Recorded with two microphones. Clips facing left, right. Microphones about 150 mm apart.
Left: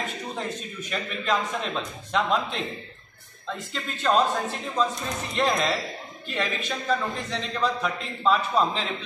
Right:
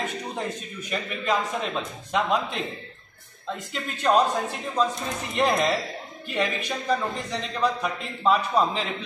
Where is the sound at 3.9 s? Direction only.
15° right (ahead or behind).